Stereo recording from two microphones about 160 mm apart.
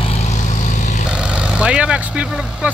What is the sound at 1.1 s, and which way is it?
Speech, 5° right (ahead or behind).